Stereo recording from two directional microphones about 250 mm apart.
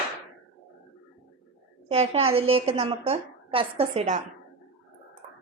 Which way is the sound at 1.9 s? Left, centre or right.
Right.